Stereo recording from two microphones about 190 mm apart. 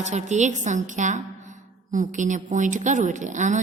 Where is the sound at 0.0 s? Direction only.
40° right (ahead or behind).